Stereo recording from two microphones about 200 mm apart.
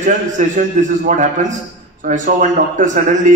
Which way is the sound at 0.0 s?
40° right (ahead or behind).